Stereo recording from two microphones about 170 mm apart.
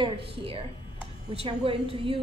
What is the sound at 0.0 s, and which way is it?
A woman's voice, 35° right (ahead or behind).